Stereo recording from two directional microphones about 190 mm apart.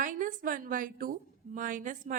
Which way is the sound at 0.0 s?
45° right (ahead or behind).